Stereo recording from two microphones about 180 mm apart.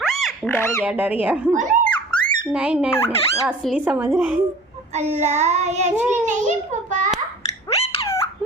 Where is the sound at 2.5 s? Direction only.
5° right (ahead or behind).